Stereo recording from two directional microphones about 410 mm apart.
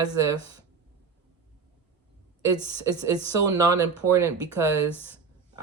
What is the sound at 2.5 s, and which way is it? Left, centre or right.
Speech, centre.